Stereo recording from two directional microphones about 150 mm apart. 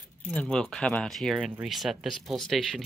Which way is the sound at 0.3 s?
5° left (ahead or behind).